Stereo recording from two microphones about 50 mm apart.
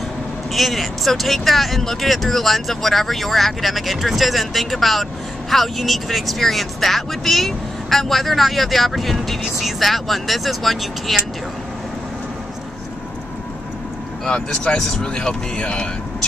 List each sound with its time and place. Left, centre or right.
0.5 s speech: centre
14.2 s speech: centre